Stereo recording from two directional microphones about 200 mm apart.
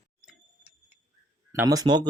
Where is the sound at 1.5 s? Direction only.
15° right (ahead or behind).